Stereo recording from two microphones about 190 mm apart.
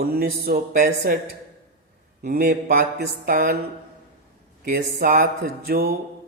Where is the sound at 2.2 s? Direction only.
55° right (ahead or behind).